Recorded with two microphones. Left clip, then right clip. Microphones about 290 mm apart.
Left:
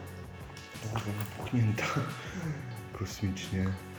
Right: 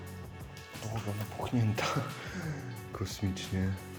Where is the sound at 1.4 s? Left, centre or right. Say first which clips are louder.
Even; centre.